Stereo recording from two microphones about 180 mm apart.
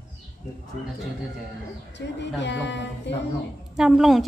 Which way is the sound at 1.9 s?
80° left.